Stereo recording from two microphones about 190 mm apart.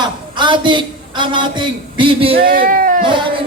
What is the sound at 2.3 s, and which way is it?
Speech, 50° right (ahead or behind).